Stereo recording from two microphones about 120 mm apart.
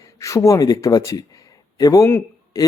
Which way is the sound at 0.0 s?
25° left (ahead or behind).